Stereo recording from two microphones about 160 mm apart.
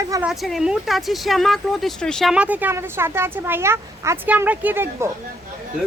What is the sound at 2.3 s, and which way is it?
Speech, 10° right (ahead or behind).